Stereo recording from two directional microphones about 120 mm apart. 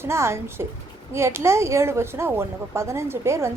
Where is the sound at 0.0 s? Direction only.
20° right (ahead or behind).